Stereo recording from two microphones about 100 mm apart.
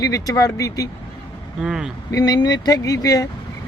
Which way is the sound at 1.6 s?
5° right (ahead or behind).